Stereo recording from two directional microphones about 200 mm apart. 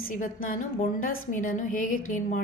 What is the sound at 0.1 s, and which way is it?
A woman's voice, 40° left (ahead or behind).